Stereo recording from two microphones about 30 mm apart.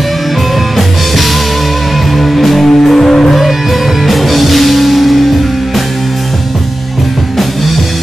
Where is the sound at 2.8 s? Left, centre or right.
Centre.